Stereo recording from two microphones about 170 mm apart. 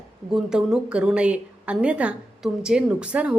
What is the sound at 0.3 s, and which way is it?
A woman's voice, 5° right (ahead or behind).